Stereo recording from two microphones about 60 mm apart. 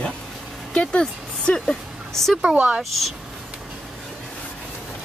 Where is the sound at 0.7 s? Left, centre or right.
Centre.